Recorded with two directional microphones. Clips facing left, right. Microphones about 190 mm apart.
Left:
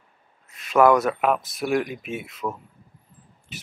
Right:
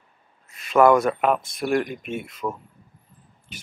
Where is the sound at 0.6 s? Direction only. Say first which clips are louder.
Right 1 dB; centre (ahead or behind).